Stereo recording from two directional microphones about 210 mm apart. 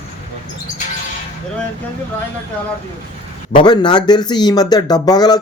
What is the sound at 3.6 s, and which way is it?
Speech, 20° left (ahead or behind).